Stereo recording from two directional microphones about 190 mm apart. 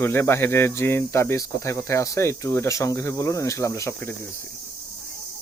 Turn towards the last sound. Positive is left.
turn(degrees=15)  # may be behind; listen again after turning